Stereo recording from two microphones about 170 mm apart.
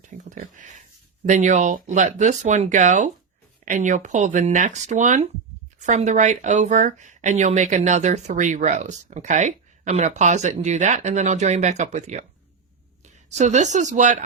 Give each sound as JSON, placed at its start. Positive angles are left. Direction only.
{"t": 0.3, "sound": "speech", "side_deg": -50}
{"t": 13.4, "sound": "speech", "side_deg": -45}